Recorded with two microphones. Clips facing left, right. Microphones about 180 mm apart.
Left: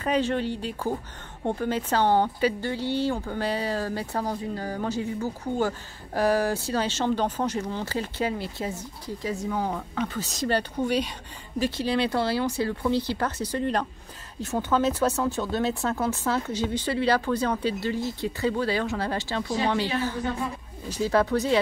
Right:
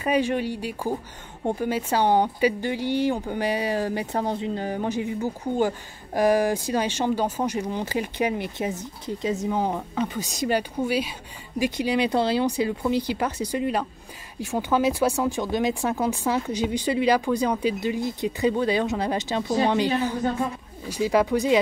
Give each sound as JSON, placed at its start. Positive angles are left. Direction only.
{"t": 0.0, "sound": "a woman's voice", "side_deg": -10}